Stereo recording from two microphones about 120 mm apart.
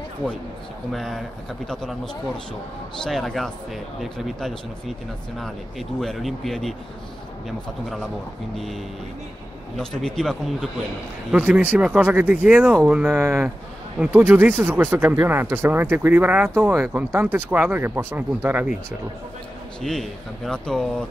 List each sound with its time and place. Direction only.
0.9 s speech: centre (ahead or behind)
3.0 s speech: 5° left (ahead or behind)
9.8 s speech: 5° left (ahead or behind)
11.3 s speech: 10° right (ahead or behind)
19.8 s speech: centre (ahead or behind)